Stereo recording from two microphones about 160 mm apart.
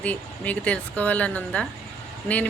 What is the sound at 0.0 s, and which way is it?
Speech, 10° left (ahead or behind).